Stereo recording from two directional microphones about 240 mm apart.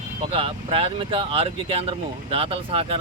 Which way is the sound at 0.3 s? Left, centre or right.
Right.